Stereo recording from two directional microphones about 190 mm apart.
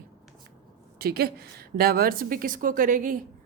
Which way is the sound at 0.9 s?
55° right (ahead or behind).